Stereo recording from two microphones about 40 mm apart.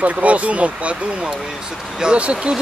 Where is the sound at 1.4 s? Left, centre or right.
Centre.